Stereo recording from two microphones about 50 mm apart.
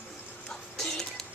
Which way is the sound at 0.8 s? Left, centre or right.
Centre.